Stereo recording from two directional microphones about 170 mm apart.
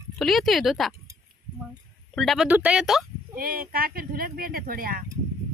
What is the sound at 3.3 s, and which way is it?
Speech, 60° right (ahead or behind).